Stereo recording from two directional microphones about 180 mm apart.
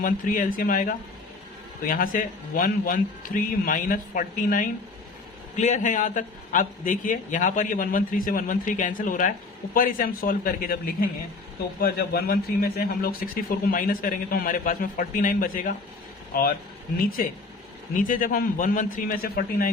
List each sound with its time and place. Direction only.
0.0 s speech: 50° left (ahead or behind)
11.8 s speech: 60° left (ahead or behind)
17.9 s speech: 50° left (ahead or behind)